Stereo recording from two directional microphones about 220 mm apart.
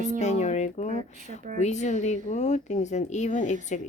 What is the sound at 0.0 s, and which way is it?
A woman's voice, 30° left (ahead or behind).